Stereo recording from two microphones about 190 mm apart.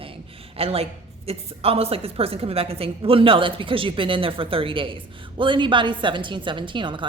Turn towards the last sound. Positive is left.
turn(degrees=-25)  # may be behind; listen again after turning